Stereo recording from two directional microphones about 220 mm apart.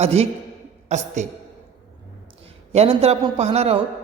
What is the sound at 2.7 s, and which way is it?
A woman's voice, 30° right (ahead or behind).